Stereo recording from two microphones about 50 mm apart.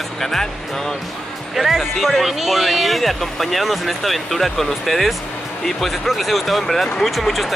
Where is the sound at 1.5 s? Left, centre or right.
Centre.